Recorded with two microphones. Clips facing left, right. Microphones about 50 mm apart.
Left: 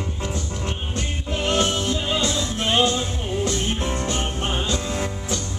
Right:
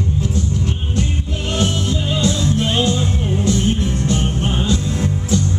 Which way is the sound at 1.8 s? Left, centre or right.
Centre.